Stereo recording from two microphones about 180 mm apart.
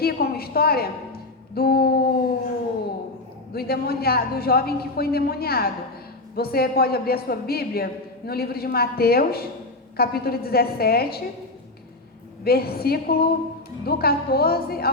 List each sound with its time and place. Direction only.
0.0 s a woman's voice: 60° left (ahead or behind)
3.5 s a man's voice: 60° left (ahead or behind)
12.5 s a man's voice: 60° left (ahead or behind)